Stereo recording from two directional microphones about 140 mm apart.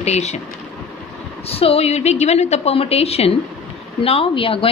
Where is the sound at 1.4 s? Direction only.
45° left (ahead or behind).